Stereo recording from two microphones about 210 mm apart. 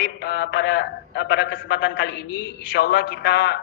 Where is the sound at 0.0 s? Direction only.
50° left (ahead or behind).